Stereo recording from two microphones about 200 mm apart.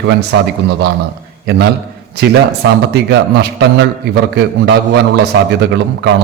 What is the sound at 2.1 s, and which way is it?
A man's voice, 55° right (ahead or behind).